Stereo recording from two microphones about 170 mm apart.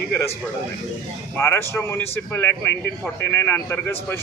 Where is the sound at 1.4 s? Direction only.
15° left (ahead or behind).